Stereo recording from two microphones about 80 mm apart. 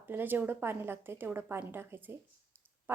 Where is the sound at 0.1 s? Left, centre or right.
Right.